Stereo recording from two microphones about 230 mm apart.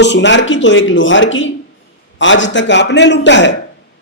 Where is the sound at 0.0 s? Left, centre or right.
Left.